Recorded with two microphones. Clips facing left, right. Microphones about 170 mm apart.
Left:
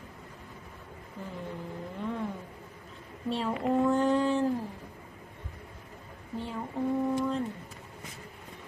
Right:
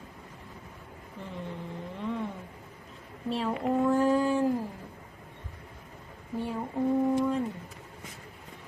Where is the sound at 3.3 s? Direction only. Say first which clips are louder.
Even; centre (ahead or behind).